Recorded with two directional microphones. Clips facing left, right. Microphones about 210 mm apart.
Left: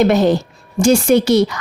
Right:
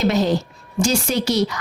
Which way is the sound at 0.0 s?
55° left (ahead or behind).